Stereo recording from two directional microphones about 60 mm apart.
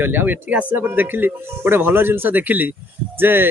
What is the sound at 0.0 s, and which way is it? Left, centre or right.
Speech, right.